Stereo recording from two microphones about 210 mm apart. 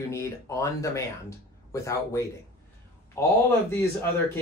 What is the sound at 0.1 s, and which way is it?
Speech, 15° left (ahead or behind).